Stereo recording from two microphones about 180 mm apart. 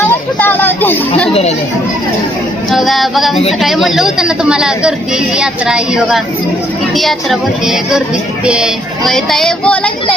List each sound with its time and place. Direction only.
0.3 s speech: 10° left (ahead or behind)
1.3 s speech: 35° left (ahead or behind)
2.6 s child singing: centre (ahead or behind)